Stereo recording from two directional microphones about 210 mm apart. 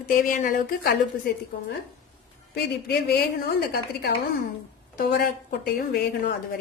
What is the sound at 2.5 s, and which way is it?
A woman's voice, 50° left (ahead or behind).